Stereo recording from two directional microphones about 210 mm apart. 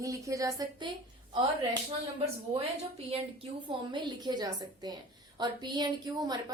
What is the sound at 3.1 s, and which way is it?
A woman's voice, 25° right (ahead or behind).